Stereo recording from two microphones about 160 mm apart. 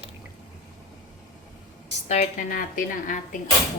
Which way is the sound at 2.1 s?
50° left (ahead or behind).